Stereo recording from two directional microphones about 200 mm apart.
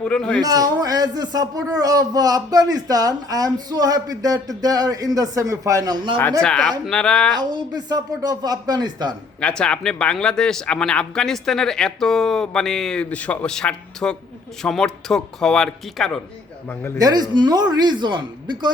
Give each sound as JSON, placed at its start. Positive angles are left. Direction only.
{"t": 0.0, "sound": "speech", "side_deg": 5}
{"t": 0.4, "sound": "a man's voice", "side_deg": -20}
{"t": 6.4, "sound": "speech", "side_deg": 5}
{"t": 7.5, "sound": "speech", "side_deg": -20}
{"t": 9.4, "sound": "speech", "side_deg": 5}
{"t": 17.0, "sound": "speech", "side_deg": -20}